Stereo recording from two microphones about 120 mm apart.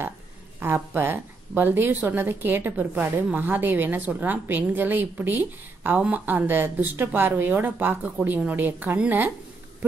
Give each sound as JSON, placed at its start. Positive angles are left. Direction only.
{"t": 0.6, "sound": "a woman's voice", "side_deg": -15}